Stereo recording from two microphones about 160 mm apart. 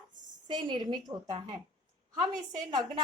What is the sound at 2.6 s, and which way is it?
Speech, 25° right (ahead or behind).